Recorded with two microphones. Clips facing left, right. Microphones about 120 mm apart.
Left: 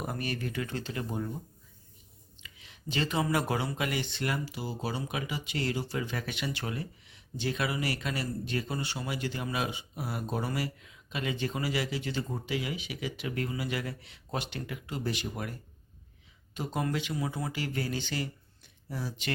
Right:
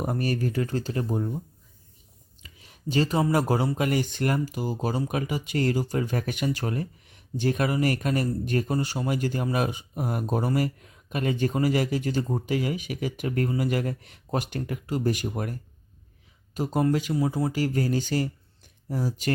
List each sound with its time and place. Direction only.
0.0 s speech: 40° right (ahead or behind)
2.4 s speech: 40° right (ahead or behind)
16.6 s speech: 40° right (ahead or behind)